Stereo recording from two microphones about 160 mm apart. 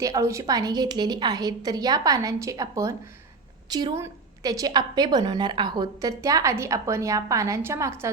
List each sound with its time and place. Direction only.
0.0 s a woman's voice: 20° right (ahead or behind)
3.7 s a woman's voice: 30° right (ahead or behind)
3.9 s a woman's voice: 20° right (ahead or behind)